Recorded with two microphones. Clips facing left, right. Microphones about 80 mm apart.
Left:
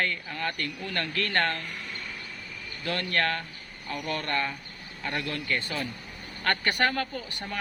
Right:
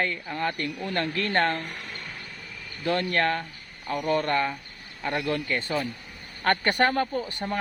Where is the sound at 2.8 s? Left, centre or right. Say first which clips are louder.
Right 4 dB; right.